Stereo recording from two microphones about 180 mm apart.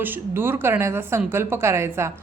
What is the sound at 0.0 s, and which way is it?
A woman's voice, 10° right (ahead or behind).